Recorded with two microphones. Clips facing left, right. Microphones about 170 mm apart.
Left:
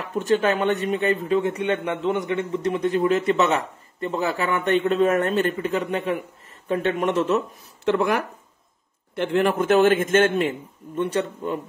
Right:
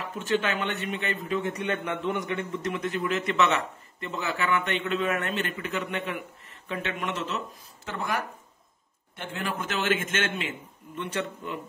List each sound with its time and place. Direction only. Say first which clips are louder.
0.3 s a man's voice: left 7 dB; 40° left (ahead or behind); by 8.1 s 70° left (ahead or behind)
9.2 s speech: left 12 dB; 70° left (ahead or behind); by 10.5 s 45° left (ahead or behind)